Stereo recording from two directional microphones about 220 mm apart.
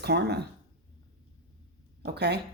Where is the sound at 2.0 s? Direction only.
50° right (ahead or behind).